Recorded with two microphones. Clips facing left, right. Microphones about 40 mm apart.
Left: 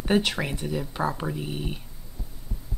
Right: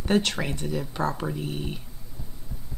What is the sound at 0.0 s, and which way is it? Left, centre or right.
Speech, centre.